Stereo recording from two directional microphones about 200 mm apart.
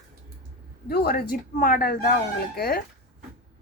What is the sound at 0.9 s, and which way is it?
A woman's voice, 50° left (ahead or behind).